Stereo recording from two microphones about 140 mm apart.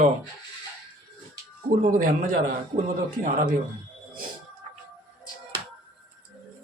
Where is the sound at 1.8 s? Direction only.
75° right (ahead or behind).